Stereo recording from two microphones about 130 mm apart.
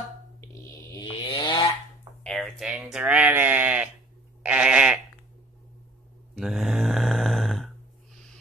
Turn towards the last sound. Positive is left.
turn(degrees=0)  # may be behind; listen again after turning